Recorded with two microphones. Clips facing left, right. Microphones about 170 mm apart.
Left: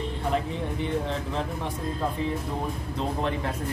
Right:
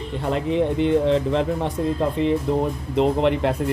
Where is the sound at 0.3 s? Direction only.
70° right (ahead or behind).